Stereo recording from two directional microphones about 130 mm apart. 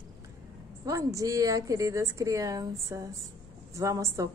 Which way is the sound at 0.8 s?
25° right (ahead or behind).